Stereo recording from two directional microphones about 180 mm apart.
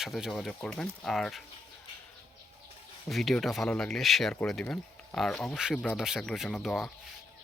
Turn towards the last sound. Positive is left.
turn(degrees=0)  # may be behind; listen again after turning